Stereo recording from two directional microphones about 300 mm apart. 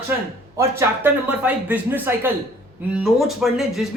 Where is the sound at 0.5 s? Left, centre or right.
Centre.